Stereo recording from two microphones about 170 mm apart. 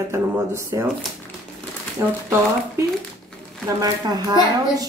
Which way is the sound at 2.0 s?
15° right (ahead or behind).